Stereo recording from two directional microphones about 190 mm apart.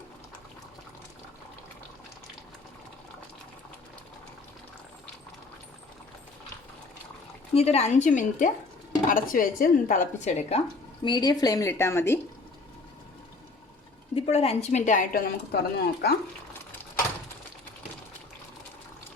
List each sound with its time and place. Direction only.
7.5 s a woman's voice: 35° left (ahead or behind)
11.0 s a woman's voice: 25° left (ahead or behind)
14.2 s a woman's voice: 30° left (ahead or behind); by 16.1 s 55° left (ahead or behind)